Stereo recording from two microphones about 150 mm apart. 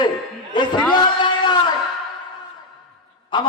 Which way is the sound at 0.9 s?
30° left (ahead or behind).